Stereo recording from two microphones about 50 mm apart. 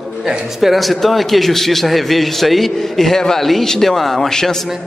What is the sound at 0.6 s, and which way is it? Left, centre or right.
A man's voice, centre.